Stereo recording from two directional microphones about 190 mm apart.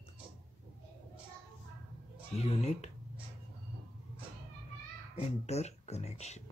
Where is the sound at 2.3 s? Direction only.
35° left (ahead or behind).